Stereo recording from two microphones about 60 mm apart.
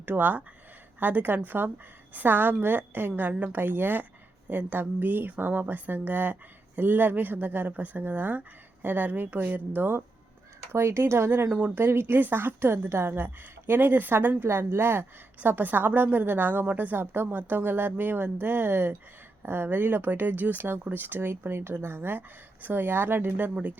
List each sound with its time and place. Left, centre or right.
0.0 s a woman's voice: right
10.7 s speech: right
11.5 s a woman's voice: right
15.4 s a woman's voice: right